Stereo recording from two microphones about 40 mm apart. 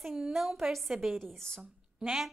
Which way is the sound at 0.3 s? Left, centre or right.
Centre.